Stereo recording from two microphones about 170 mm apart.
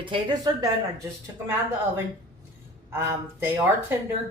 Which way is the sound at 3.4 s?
15° right (ahead or behind).